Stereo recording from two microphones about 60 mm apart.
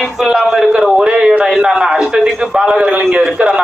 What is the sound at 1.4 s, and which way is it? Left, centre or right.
A man's voice, centre.